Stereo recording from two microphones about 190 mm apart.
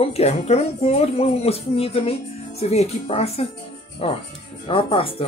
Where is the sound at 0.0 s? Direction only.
35° left (ahead or behind).